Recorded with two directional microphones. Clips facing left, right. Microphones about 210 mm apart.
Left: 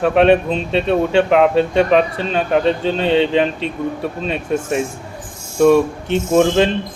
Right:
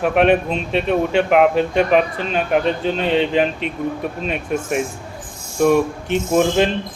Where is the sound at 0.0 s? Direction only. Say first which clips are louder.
Left 3 dB; 30° left (ahead or behind).